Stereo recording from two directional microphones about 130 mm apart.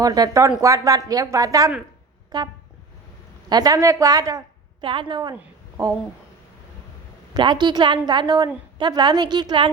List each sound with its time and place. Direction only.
0.0 s a woman's voice: 30° right (ahead or behind)
3.5 s a woman's voice: 30° right (ahead or behind)
4.8 s a woman's voice: 40° right (ahead or behind)
5.3 s a sound: 20° right (ahead or behind)
7.3 s a woman's voice: 35° right (ahead or behind)